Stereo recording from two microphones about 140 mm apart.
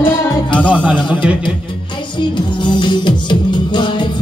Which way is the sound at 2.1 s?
35° left (ahead or behind).